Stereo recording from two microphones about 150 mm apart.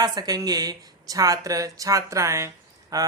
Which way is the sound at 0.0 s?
25° right (ahead or behind).